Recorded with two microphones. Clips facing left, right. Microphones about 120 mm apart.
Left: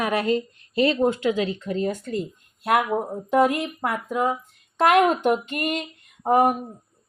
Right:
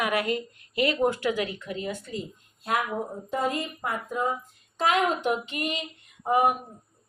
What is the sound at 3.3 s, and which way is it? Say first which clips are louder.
Speech: left 9 dB; 75° left (ahead or behind).